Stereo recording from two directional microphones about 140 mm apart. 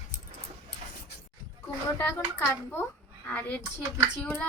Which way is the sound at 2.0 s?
20° left (ahead or behind).